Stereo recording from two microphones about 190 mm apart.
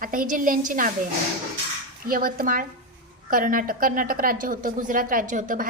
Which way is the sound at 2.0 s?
45° right (ahead or behind).